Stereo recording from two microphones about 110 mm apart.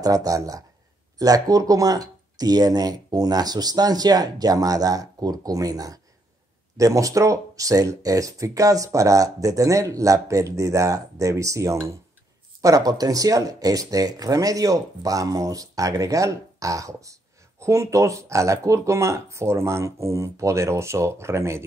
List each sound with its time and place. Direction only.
0.0 s speech: 35° right (ahead or behind)